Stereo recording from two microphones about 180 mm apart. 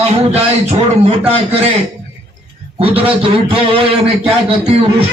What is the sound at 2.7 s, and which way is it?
A man's voice, 30° right (ahead or behind).